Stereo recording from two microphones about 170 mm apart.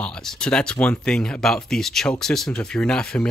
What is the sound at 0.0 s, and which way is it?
Speech, 5° left (ahead or behind).